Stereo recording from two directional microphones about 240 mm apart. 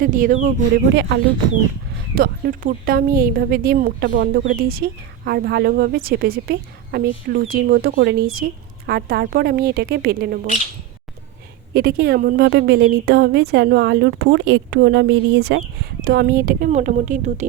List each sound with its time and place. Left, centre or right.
0.0 s a woman's voice: right
2.1 s a woman's voice: right
11.7 s a woman's voice: right